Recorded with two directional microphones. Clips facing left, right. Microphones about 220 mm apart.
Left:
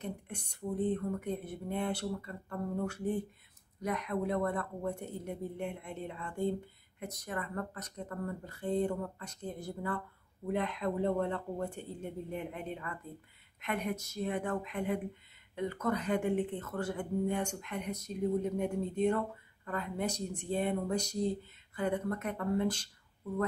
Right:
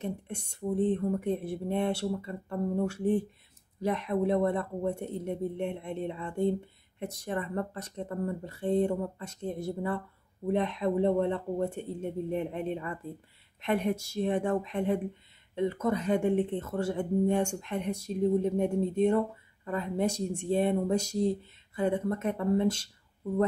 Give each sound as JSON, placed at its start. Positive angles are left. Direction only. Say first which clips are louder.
{"t": 0.0, "sound": "speech", "louder": "right 5 dB", "side_deg": -25}